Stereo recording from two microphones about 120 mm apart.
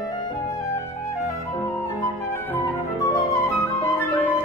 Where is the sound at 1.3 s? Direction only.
25° left (ahead or behind).